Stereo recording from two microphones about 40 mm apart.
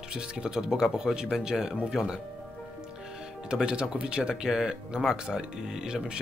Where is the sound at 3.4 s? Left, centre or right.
Right.